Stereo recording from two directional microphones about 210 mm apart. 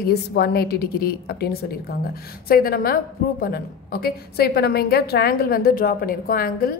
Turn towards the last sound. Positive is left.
turn(degrees=45)  # may be behind; listen again after turning